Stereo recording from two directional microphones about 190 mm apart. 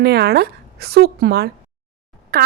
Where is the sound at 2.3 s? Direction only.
50° right (ahead or behind).